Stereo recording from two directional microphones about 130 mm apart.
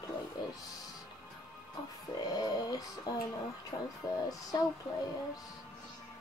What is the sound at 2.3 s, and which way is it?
Child singing, 30° left (ahead or behind).